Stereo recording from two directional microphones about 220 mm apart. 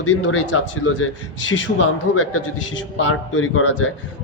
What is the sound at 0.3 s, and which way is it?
Speech, 70° left (ahead or behind).